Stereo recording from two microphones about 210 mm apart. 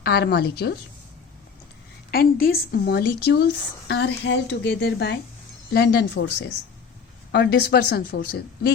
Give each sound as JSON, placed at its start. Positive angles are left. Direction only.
{"t": 0.0, "sound": "speech", "side_deg": 50}
{"t": 2.0, "sound": "speech", "side_deg": 45}
{"t": 7.3, "sound": "speech", "side_deg": 50}